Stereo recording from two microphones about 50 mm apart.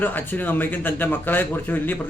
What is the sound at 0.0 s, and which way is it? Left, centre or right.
A man's voice, left.